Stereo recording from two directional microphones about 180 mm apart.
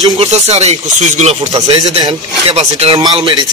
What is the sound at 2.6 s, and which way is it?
Speech, 35° right (ahead or behind).